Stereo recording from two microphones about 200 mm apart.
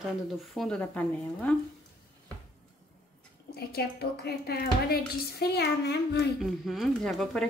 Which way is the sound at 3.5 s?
50° left (ahead or behind).